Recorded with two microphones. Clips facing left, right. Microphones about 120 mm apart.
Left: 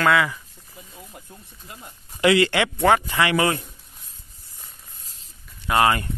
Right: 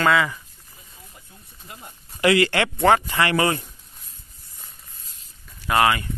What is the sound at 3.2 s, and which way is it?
Speech, 15° left (ahead or behind).